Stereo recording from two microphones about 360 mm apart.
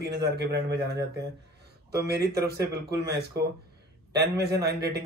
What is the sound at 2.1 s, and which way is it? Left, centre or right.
Speech, right.